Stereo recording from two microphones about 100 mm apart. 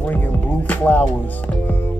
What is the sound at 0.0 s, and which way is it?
Music, 20° left (ahead or behind).